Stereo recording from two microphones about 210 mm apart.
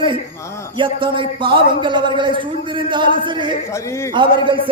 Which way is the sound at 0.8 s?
25° right (ahead or behind).